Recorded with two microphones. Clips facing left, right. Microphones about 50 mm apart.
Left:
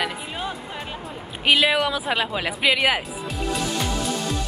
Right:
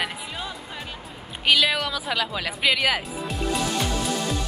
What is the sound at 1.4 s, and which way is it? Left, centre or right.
A woman's voice, centre.